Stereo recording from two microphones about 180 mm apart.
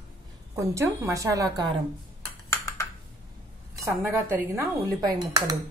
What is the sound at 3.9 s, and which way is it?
A woman's voice, 15° right (ahead or behind).